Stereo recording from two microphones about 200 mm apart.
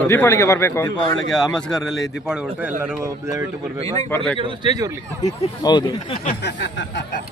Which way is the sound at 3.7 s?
35° right (ahead or behind).